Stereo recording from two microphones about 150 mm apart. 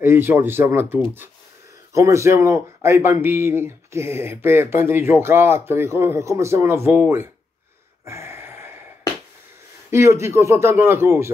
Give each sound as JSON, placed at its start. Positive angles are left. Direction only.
{"t": 0.0, "sound": "speech", "side_deg": -15}
{"t": 2.0, "sound": "speech", "side_deg": -20}
{"t": 8.0, "sound": "a sound", "side_deg": -15}
{"t": 9.8, "sound": "speech", "side_deg": -20}